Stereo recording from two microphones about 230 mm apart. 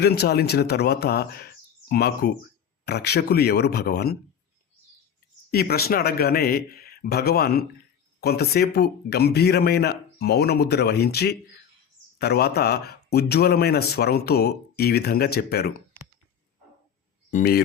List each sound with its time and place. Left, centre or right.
0.0 s speech: left
5.5 s speech: left
17.3 s speech: left